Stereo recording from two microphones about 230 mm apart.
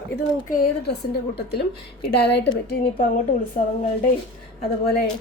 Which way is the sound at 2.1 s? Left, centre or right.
Left.